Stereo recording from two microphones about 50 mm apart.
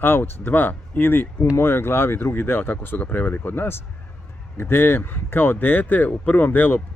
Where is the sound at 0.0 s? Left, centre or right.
Left.